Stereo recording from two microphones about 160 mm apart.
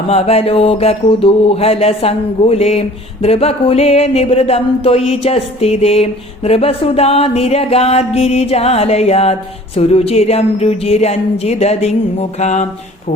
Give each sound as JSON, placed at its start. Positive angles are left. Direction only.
{"t": 0.1, "sound": "mantra", "side_deg": 40}